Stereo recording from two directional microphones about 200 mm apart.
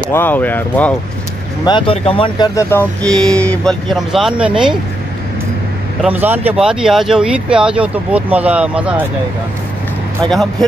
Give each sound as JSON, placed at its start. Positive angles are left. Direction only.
{"t": 0.1, "sound": "speech", "side_deg": 10}
{"t": 1.6, "sound": "speech", "side_deg": 25}
{"t": 2.7, "sound": "speech", "side_deg": 5}
{"t": 6.0, "sound": "speech", "side_deg": -10}
{"t": 10.2, "sound": "speech", "side_deg": 0}